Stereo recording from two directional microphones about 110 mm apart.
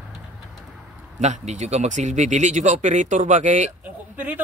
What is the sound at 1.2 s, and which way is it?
Speech, 90° right.